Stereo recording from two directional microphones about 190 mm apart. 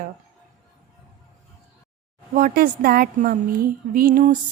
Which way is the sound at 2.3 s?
50° right (ahead or behind).